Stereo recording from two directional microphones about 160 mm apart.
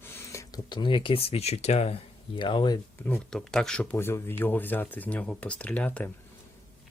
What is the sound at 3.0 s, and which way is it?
Speech, 5° left (ahead or behind).